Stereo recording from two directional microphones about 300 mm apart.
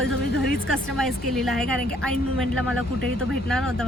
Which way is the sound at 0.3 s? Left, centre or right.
Left.